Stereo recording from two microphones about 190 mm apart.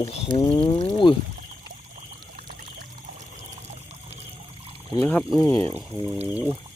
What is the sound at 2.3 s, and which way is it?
Pour, 45° right (ahead or behind).